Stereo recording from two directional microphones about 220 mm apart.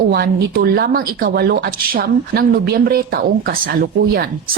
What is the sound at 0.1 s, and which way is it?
A woman's voice, 45° right (ahead or behind).